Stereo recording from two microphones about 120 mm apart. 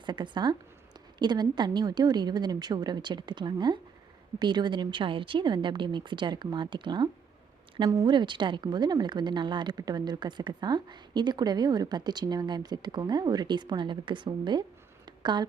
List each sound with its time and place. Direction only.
0.0 s speech: 40° right (ahead or behind)